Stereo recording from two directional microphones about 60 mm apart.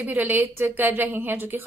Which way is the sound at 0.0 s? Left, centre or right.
Right.